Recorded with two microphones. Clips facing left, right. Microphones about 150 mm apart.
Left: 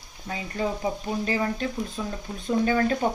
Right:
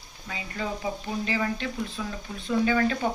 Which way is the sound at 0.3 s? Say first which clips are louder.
Left 4 dB; 35° left (ahead or behind).